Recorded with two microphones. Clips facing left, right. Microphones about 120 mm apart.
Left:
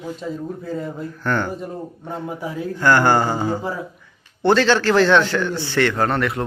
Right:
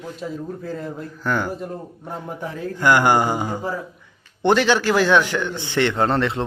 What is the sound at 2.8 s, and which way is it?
Speech, 15° right (ahead or behind).